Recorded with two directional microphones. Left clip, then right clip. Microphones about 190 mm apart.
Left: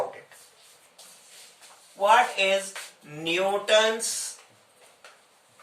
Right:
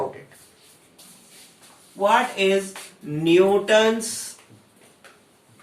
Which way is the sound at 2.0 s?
15° left (ahead or behind).